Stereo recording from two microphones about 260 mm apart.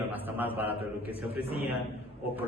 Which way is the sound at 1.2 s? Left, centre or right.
Left.